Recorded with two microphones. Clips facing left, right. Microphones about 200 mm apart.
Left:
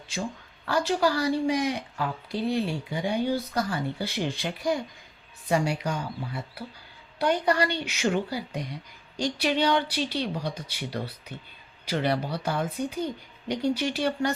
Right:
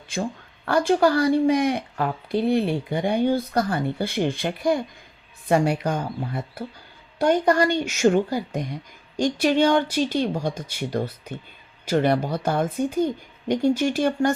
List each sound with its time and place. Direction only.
0.1 s speech: 55° right (ahead or behind)